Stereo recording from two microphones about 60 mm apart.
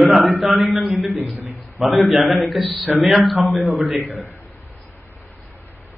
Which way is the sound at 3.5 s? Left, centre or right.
Right.